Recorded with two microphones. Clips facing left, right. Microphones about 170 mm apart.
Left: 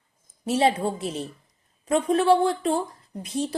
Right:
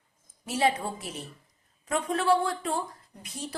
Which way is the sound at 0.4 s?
25° left (ahead or behind).